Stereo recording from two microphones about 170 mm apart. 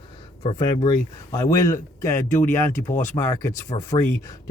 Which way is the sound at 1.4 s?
15° left (ahead or behind).